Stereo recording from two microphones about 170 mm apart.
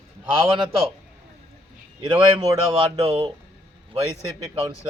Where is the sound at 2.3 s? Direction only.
30° right (ahead or behind).